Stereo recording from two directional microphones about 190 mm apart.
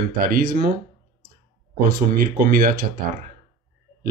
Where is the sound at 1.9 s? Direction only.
50° right (ahead or behind).